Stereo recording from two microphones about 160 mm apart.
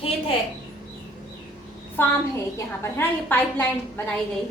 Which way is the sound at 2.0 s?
15° left (ahead or behind).